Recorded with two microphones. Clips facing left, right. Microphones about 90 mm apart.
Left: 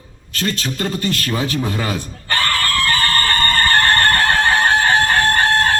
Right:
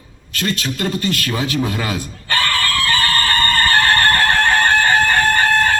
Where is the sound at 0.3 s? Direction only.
30° left (ahead or behind).